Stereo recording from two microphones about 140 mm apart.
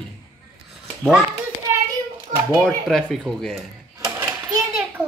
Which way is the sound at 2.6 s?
5° left (ahead or behind).